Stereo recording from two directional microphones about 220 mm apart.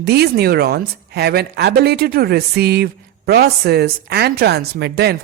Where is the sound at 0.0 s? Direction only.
45° right (ahead or behind).